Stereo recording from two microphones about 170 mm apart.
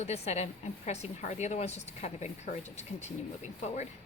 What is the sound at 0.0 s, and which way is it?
A woman's voice, 40° left (ahead or behind).